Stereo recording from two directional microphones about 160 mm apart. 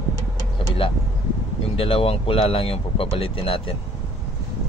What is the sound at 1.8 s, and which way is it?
Speech, 35° left (ahead or behind).